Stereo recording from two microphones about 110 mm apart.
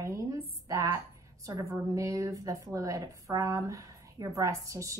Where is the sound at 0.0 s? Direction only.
30° right (ahead or behind).